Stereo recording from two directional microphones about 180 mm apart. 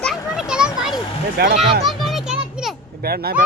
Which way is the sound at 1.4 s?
60° right (ahead or behind).